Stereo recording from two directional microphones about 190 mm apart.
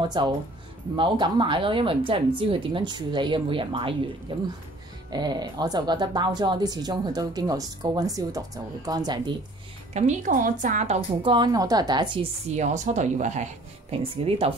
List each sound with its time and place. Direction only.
0.0 s speech: 25° right (ahead or behind)
9.9 s speech: 40° right (ahead or behind); by 12.3 s 25° right (ahead or behind)
12.4 s speech: 40° right (ahead or behind)